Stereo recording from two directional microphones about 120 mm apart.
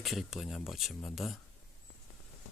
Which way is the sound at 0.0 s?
Centre (ahead or behind).